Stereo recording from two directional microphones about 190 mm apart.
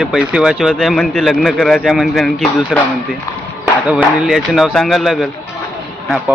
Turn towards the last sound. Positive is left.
turn(degrees=0)  # may be behind; listen again after turning